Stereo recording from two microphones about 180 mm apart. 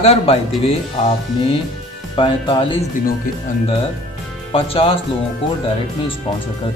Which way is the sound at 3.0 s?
50° left (ahead or behind).